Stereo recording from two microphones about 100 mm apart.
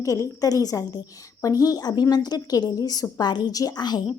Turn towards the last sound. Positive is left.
turn(degrees=45)  # may be behind; listen again after turning